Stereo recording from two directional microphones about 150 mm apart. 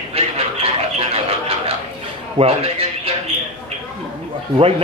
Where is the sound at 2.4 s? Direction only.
40° right (ahead or behind).